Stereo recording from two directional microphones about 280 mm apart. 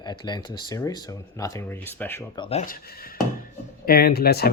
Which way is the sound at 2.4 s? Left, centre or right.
Left.